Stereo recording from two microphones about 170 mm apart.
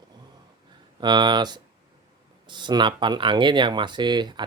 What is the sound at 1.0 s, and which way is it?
Speech, 25° right (ahead or behind).